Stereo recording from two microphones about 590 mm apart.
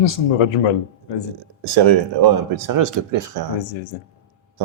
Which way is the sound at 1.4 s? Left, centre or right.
Right.